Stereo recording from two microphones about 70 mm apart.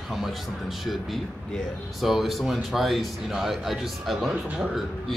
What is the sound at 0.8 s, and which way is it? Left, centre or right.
Speech, centre.